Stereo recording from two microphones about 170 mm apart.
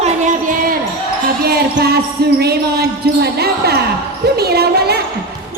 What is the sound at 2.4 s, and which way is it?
A woman's voice, 70° right (ahead or behind).